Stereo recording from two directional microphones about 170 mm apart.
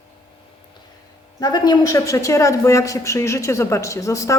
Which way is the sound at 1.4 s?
25° left (ahead or behind).